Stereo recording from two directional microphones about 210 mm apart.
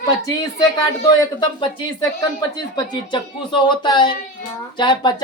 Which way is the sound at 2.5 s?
20° left (ahead or behind).